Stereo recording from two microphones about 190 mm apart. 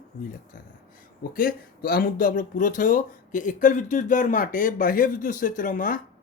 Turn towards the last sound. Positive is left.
turn(degrees=45)  # may be behind; listen again after turning